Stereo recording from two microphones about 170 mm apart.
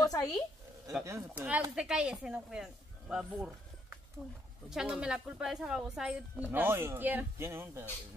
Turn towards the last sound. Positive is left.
turn(degrees=-15)  # may be behind; listen again after turning